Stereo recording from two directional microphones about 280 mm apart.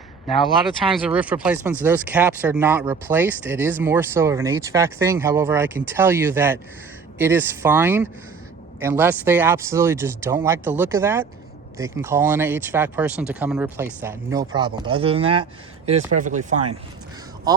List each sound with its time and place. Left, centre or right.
0.3 s speech: centre; by 16.6 s right